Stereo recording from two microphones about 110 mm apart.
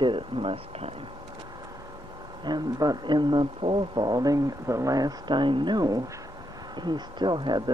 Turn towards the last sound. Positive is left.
turn(degrees=-45)  # may be behind; listen again after turning